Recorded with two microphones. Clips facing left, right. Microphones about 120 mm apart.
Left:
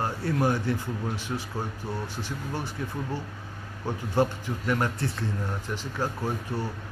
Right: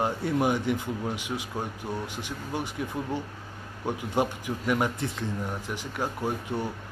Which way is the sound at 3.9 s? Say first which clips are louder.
Left 1 dB; 15° right (ahead or behind).